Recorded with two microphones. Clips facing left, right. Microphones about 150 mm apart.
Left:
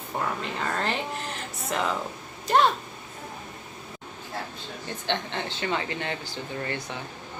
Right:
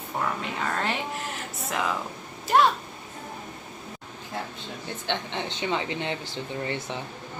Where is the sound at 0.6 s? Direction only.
Centre (ahead or behind).